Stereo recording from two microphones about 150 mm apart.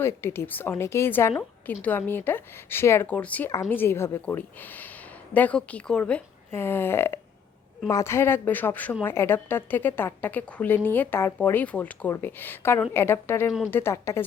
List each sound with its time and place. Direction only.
0.0 s a woman's voice: 15° left (ahead or behind)